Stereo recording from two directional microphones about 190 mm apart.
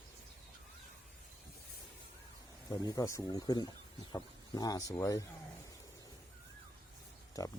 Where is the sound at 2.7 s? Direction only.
20° left (ahead or behind).